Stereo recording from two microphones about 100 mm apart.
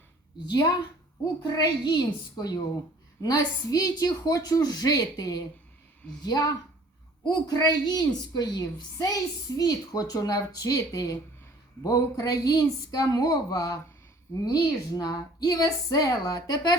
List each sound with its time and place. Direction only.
1.4 s a woman's voice: 45° left (ahead or behind)